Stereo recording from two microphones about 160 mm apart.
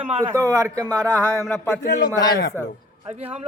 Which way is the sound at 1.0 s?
20° right (ahead or behind).